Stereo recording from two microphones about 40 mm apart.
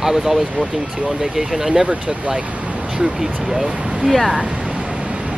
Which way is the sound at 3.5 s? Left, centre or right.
Centre.